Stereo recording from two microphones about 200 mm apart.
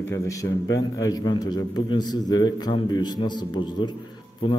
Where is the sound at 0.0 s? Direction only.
15° left (ahead or behind).